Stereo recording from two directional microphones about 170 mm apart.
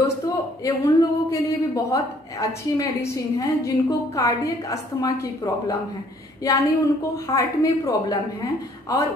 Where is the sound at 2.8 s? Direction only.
20° left (ahead or behind).